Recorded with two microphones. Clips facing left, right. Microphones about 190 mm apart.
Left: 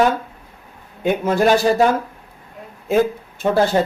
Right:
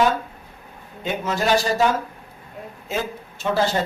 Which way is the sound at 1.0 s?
55° left (ahead or behind).